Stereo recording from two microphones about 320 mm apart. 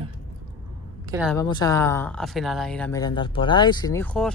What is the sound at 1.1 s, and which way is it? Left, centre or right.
Speech, centre.